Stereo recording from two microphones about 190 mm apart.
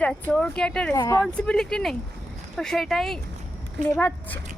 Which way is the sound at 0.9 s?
20° left (ahead or behind).